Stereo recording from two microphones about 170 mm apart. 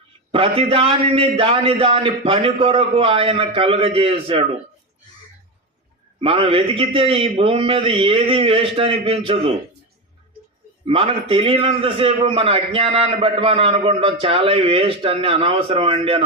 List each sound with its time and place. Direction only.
0.3 s a man's voice: 35° right (ahead or behind)
6.1 s a man's voice: 35° right (ahead or behind)
10.8 s a man's voice: 30° right (ahead or behind)